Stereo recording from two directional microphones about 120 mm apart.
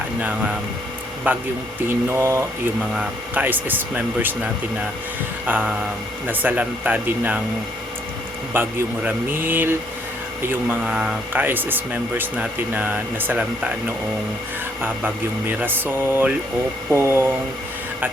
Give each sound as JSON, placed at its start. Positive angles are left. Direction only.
{"t": 0.2, "sound": "speech", "side_deg": -10}
{"t": 5.5, "sound": "speech", "side_deg": -15}
{"t": 8.5, "sound": "speech", "side_deg": -20}